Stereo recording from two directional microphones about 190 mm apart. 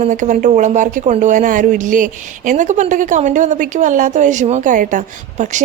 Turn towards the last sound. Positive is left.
turn(degrees=-40)  # may be behind; listen again after turning